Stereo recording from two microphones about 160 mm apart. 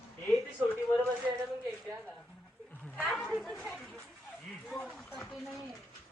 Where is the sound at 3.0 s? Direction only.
5° left (ahead or behind).